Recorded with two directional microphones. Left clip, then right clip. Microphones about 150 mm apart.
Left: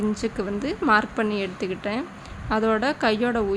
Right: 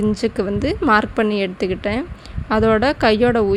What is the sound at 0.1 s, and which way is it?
A woman's voice, 45° right (ahead or behind).